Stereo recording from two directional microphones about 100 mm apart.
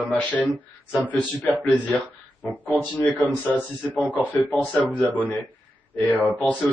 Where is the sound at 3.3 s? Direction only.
15° left (ahead or behind).